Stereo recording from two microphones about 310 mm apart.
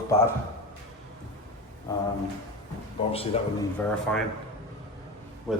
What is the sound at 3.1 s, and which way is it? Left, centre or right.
Speech, centre.